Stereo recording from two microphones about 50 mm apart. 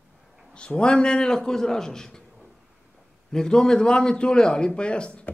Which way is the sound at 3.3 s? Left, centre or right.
Centre.